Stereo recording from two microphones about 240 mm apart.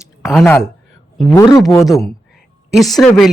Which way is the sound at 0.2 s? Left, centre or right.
Centre.